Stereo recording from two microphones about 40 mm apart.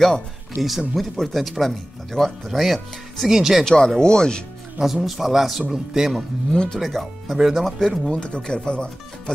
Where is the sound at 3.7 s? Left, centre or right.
Centre.